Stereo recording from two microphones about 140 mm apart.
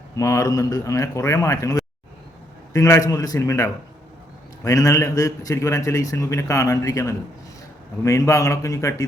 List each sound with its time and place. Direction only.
0.2 s a man's voice: 20° left (ahead or behind)